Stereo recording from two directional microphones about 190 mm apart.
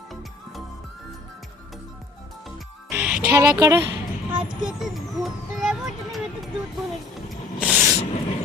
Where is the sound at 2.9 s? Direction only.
5° right (ahead or behind).